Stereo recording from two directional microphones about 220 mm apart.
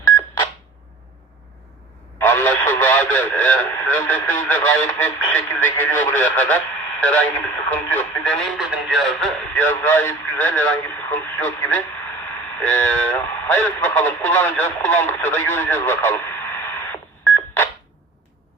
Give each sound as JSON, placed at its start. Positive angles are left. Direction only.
{"t": 2.1, "sound": "speech", "side_deg": 10}